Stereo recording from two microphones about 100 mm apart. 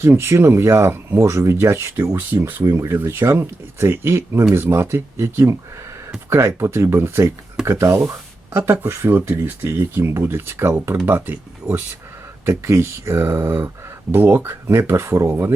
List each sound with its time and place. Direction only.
0.0 s speech: 25° right (ahead or behind)